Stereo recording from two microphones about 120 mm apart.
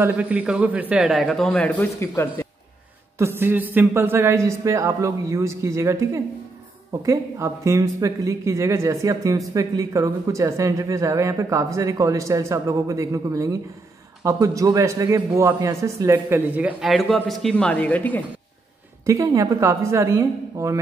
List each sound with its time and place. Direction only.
0.0 s a man's voice: 10° right (ahead or behind); by 1.7 s 5° left (ahead or behind)
1.8 s speech: 20° left (ahead or behind)
3.2 s speech: 20° right (ahead or behind)
16.8 s speech: centre (ahead or behind)
19.0 s speech: 25° right (ahead or behind)